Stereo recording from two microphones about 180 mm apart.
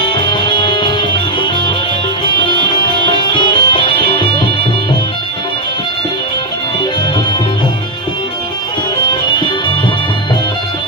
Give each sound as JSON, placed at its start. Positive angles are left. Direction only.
{"t": 0.0, "sound": "music", "side_deg": 25}
{"t": 3.3, "sound": "music", "side_deg": 25}